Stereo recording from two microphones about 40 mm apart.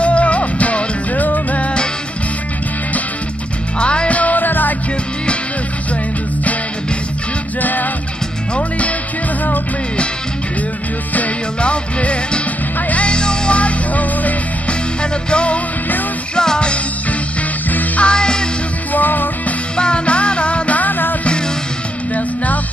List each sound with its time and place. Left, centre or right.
0.0 s music: left
3.8 s music: left
4.2 s music: left
7.6 s music: left
8.5 s music: left
11.6 s music: left
13.6 s music: left
17.6 s music: left
18.0 s music: left
18.9 s music: left
19.8 s music: left